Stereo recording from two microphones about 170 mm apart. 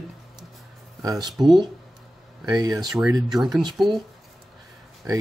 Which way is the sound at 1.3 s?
Centre (ahead or behind).